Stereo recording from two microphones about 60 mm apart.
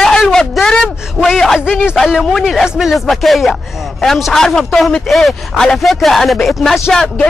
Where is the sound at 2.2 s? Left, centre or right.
Centre.